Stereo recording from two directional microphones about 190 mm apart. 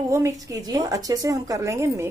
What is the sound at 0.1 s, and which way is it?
A woman's voice, 15° right (ahead or behind).